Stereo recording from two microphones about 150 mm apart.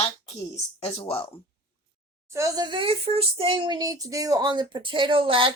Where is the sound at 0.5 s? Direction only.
45° left (ahead or behind).